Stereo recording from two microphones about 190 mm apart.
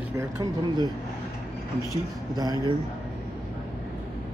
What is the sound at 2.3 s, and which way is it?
Speech, 20° right (ahead or behind).